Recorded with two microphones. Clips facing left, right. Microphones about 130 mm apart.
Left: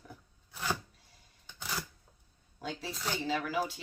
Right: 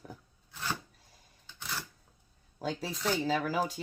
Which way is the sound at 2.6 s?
40° right (ahead or behind).